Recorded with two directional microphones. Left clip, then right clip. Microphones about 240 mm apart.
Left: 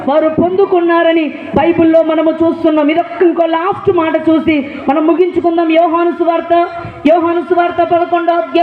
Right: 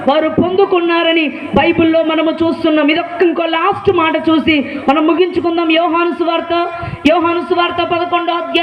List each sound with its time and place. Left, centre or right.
0.1 s a man's voice: right